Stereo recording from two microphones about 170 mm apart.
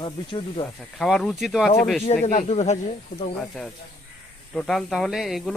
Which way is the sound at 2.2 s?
40° left (ahead or behind).